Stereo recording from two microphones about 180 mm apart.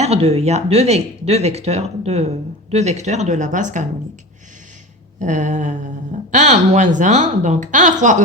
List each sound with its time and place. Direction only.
0.0 s speech: 35° right (ahead or behind)
5.2 s speech: 45° right (ahead or behind)